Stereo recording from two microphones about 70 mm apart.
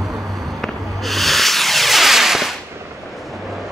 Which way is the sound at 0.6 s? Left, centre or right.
Centre.